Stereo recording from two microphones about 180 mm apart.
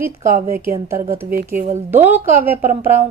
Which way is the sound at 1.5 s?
45° right (ahead or behind).